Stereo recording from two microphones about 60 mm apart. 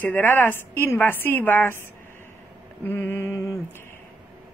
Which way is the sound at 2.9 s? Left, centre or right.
Left.